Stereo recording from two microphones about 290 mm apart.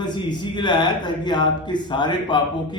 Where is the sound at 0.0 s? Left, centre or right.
Centre.